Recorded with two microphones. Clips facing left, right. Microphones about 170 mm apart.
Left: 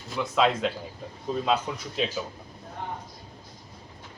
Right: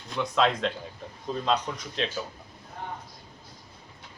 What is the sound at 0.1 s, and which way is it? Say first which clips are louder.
A man's voice: left 1 dB; 5° left (ahead or behind).